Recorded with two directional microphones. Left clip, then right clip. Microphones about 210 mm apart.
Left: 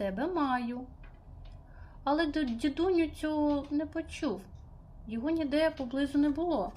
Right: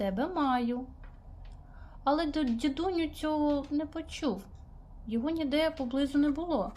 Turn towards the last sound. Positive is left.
turn(degrees=-10)  # may be behind; listen again after turning